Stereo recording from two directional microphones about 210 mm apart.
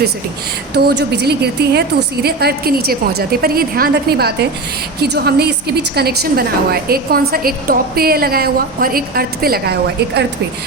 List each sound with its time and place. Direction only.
0.8 s a woman's voice: 50° right (ahead or behind)